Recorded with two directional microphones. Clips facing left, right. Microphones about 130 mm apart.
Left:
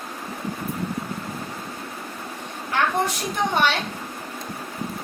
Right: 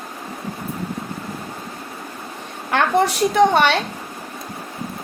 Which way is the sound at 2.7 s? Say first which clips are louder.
Right 5 dB; 80° right.